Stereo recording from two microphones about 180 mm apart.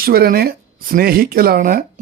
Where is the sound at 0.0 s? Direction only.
60° right (ahead or behind).